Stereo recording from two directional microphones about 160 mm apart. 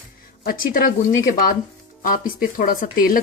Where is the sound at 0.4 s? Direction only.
60° left (ahead or behind).